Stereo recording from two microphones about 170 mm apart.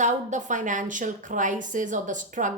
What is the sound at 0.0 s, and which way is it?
A woman's voice, 45° right (ahead or behind).